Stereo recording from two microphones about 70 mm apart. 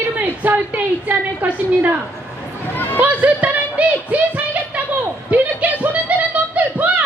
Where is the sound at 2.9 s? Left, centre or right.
Right.